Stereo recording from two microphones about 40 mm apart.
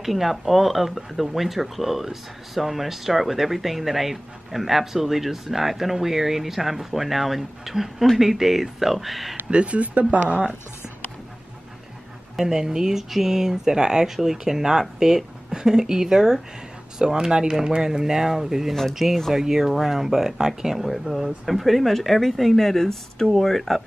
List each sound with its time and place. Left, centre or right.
0.0 s speech: centre
9.5 s speech: right
12.4 s speech: centre
18.7 s speech: centre
19.3 s speech: centre